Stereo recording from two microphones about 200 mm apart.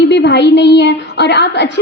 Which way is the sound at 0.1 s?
60° left (ahead or behind).